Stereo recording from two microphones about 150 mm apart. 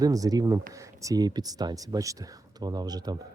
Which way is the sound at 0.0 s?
25° right (ahead or behind).